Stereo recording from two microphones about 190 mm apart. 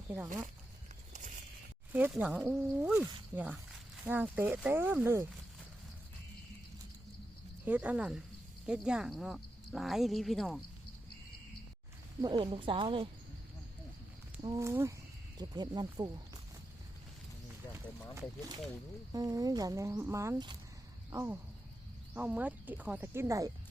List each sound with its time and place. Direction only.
1.1 s a sound: 40° right (ahead or behind)
1.9 s speech: 10° right (ahead or behind)
7.6 s speech: 10° right (ahead or behind)
12.2 s speech: 25° right (ahead or behind)
14.4 s speech: 20° right (ahead or behind)
18.1 s speech: 15° right (ahead or behind)